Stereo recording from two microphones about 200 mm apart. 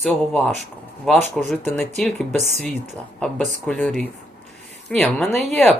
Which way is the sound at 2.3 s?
35° right (ahead or behind).